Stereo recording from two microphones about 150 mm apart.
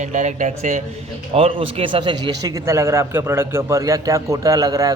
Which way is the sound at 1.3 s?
40° right (ahead or behind).